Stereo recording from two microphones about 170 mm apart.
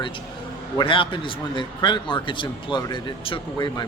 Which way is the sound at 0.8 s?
30° left (ahead or behind).